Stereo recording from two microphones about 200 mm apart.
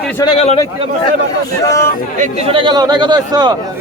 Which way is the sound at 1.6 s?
15° left (ahead or behind).